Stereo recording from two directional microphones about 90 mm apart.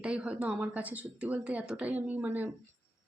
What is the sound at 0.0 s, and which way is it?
Speech, 10° right (ahead or behind).